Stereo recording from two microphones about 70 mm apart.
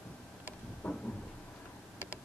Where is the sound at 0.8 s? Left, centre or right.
Left.